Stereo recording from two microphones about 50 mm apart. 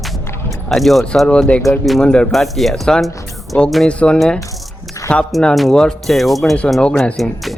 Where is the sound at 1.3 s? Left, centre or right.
Left.